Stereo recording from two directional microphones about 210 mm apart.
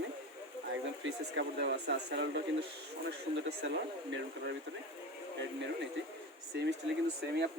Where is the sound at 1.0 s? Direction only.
60° right (ahead or behind).